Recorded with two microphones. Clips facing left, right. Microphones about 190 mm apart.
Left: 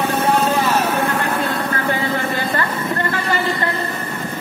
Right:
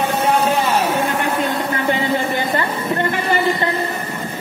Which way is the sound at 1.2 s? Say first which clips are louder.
Right 1 dB; 20° right (ahead or behind).